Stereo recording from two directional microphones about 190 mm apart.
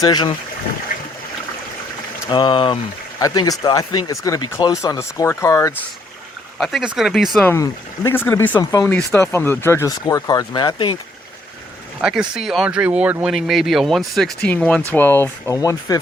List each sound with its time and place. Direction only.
0.0 s speech: 20° left (ahead or behind)
0.9 s a sound: 45° left (ahead or behind)
2.3 s speech: 25° left (ahead or behind)
6.6 s speech: centre (ahead or behind)
7.5 s speech: 15° left (ahead or behind)
12.0 s speech: 5° right (ahead or behind); by 16.0 s 15° left (ahead or behind)